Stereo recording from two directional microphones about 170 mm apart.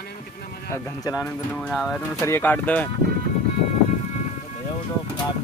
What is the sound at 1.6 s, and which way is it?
Speech, centre (ahead or behind).